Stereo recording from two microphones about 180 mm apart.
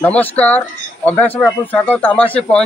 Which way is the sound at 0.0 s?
10° left (ahead or behind).